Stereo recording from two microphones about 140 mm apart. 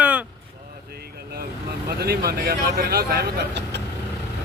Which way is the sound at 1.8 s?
90° right.